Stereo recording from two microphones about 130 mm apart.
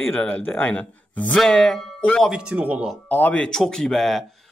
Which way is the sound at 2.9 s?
10° left (ahead or behind).